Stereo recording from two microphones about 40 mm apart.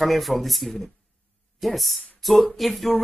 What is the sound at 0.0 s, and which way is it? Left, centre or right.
Speech, centre.